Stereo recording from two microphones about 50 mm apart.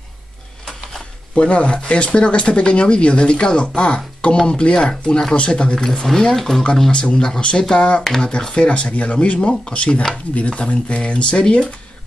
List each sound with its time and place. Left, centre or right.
1.3 s speech: left
6.0 s speech: centre